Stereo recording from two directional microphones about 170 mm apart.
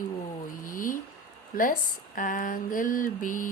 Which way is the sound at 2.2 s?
50° left (ahead or behind).